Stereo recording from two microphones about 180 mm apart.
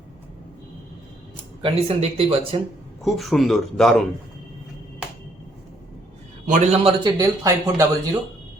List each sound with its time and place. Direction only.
1.6 s speech: 30° right (ahead or behind)
3.0 s speech: centre (ahead or behind)
6.5 s speech: 35° right (ahead or behind)
7.2 s speech: 20° right (ahead or behind)